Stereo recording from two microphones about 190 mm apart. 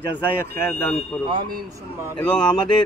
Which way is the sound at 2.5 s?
20° left (ahead or behind).